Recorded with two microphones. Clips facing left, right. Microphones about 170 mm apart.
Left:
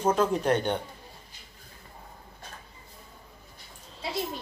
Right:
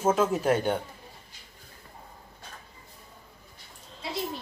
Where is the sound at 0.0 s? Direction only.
5° right (ahead or behind).